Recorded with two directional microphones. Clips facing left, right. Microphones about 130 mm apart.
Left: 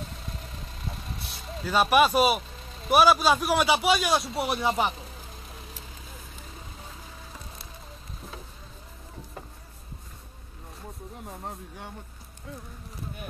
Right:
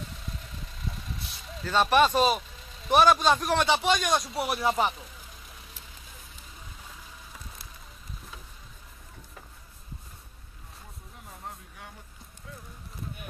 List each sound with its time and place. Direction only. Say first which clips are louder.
0.4 s vehicle: left 2 dB; 40° left (ahead or behind)
1.6 s a man's voice: left 1 dB; 10° left (ahead or behind)
11.2 s speech: left 3 dB; 30° left (ahead or behind)